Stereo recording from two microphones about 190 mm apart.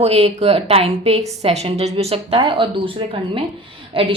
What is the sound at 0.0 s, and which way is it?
A woman's voice, 35° right (ahead or behind).